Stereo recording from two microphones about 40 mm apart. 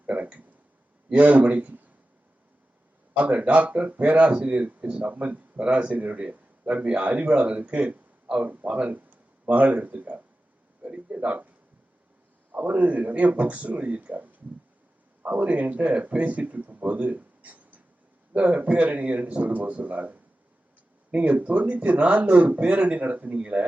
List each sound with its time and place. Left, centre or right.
0.0 s a sound: right
1.1 s speech: right
3.2 s speech: right
12.6 s speech: right